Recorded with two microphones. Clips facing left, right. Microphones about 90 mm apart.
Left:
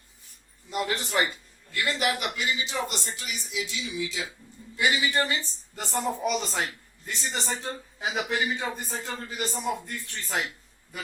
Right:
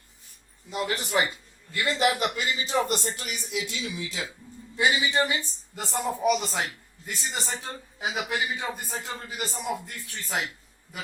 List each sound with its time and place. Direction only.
0.7 s a man's voice: centre (ahead or behind)
1.8 s a man's voice: 35° right (ahead or behind); by 4.2 s 55° right (ahead or behind)
4.8 s a man's voice: 25° right (ahead or behind); by 10.4 s 5° right (ahead or behind)